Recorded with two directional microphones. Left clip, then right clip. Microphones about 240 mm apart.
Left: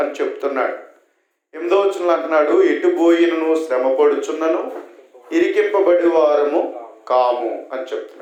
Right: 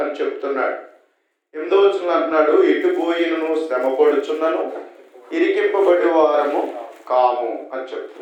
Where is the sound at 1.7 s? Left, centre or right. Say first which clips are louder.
Even; left.